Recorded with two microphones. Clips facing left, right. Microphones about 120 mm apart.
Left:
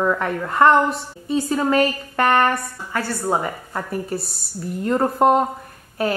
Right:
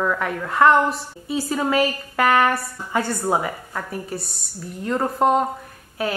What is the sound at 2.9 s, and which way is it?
Speech, 15° right (ahead or behind).